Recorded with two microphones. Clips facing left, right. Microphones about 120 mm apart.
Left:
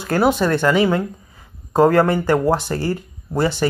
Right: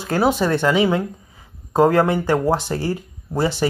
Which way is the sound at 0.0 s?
Centre (ahead or behind).